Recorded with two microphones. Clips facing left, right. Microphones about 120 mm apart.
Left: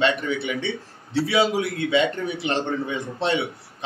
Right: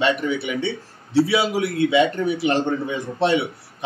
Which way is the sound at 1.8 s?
15° right (ahead or behind).